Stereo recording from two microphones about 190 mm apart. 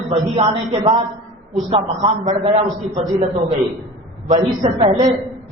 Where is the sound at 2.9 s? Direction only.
35° right (ahead or behind).